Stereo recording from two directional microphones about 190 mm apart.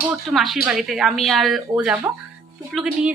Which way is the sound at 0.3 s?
Centre (ahead or behind).